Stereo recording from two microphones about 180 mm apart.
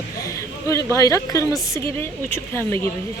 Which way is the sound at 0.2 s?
20° left (ahead or behind).